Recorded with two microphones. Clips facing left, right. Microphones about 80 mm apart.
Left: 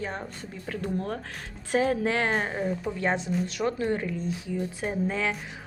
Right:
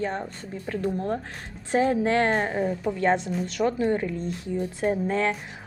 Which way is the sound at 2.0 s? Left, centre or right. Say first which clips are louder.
Right 4 dB; right.